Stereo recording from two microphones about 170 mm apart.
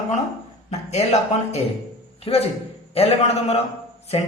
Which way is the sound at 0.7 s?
40° left (ahead or behind).